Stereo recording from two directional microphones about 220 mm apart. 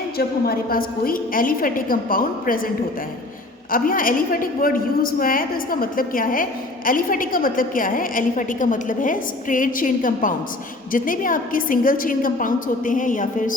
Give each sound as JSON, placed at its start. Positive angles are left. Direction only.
{"t": 0.2, "sound": "a woman's voice", "side_deg": 45}
{"t": 3.7, "sound": "a woman's voice", "side_deg": 40}